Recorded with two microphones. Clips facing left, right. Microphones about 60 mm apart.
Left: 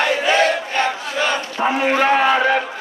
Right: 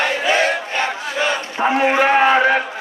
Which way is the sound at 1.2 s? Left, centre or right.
Centre.